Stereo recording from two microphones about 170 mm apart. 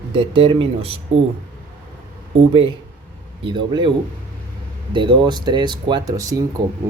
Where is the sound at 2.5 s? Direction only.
35° right (ahead or behind).